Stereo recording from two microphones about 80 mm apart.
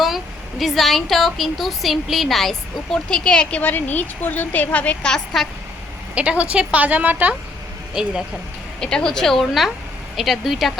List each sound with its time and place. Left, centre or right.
0.6 s a woman's voice: centre
5.1 s speech: centre
6.1 s a woman's voice: centre
8.0 s speech: centre
8.8 s speech: centre